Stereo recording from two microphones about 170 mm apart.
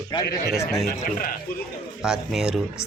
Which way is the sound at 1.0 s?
55° left (ahead or behind).